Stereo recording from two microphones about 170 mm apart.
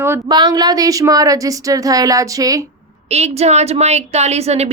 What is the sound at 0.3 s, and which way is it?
A woman's voice, 25° right (ahead or behind).